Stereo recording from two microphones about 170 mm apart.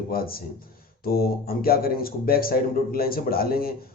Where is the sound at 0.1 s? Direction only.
60° left (ahead or behind).